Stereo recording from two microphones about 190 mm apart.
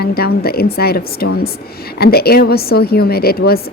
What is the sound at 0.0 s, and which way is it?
Speech, 55° left (ahead or behind).